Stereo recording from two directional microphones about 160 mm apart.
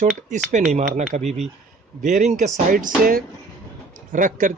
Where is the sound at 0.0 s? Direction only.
50° right (ahead or behind).